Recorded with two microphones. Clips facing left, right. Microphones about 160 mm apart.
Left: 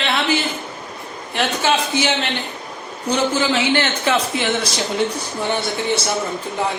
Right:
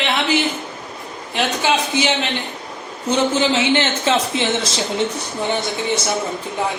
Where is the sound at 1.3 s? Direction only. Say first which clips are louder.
Even; 15° right (ahead or behind).